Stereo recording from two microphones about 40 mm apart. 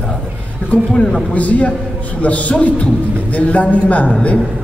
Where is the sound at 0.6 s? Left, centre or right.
Left.